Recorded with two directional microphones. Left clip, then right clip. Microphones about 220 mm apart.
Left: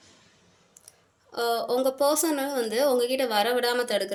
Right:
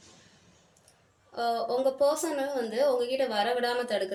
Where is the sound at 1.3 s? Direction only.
55° left (ahead or behind).